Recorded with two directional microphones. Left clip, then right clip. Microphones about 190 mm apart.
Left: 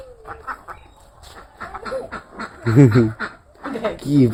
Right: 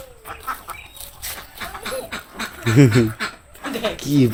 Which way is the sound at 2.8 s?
5° left (ahead or behind).